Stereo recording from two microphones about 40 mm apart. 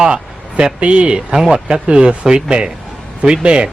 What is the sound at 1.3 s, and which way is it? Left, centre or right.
A man's voice, centre.